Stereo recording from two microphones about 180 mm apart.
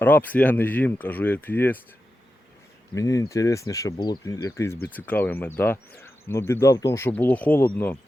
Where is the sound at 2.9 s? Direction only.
20° left (ahead or behind).